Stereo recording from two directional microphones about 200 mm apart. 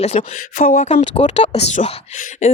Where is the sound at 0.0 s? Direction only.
30° left (ahead or behind).